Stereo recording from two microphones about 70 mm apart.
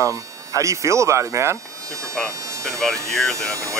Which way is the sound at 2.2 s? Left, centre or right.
Right.